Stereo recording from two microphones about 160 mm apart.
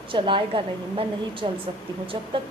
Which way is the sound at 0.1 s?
30° right (ahead or behind).